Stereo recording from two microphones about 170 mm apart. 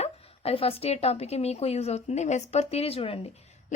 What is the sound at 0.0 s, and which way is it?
A woman's voice, 35° left (ahead or behind).